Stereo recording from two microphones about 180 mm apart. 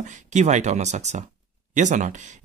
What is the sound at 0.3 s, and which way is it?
Speech, 40° right (ahead or behind).